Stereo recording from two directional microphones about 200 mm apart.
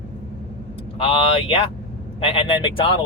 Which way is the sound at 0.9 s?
30° left (ahead or behind).